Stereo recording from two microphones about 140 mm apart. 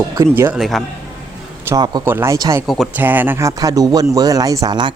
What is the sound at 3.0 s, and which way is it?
Speech, 15° right (ahead or behind).